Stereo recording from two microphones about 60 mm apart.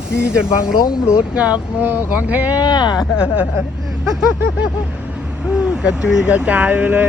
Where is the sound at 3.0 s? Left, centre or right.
Centre.